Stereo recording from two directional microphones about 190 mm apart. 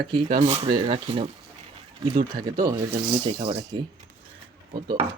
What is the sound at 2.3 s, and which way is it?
Speech, 45° right (ahead or behind).